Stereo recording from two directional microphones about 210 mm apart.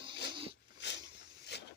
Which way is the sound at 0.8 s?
55° left (ahead or behind).